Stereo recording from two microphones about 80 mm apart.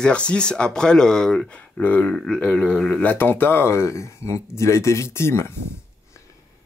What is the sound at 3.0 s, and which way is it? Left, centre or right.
Speech, left.